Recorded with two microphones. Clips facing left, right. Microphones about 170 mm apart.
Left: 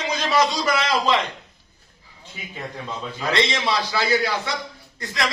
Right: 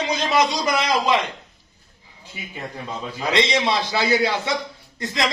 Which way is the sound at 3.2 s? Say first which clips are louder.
Right 2 dB; 20° right (ahead or behind).